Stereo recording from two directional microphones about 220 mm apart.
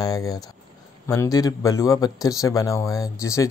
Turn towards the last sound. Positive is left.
turn(degrees=15)  # may be behind; listen again after turning